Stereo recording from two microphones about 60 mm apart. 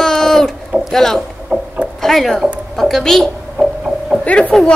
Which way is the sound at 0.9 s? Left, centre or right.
Centre.